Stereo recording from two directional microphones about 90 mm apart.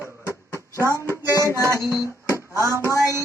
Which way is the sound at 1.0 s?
40° left (ahead or behind).